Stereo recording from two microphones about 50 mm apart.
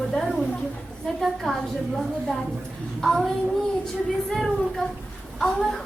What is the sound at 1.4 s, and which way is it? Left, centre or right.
Speech, centre.